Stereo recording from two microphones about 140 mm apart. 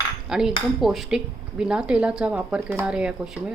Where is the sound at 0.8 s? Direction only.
Centre (ahead or behind).